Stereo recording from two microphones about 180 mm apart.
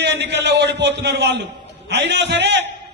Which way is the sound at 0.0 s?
70° right (ahead or behind).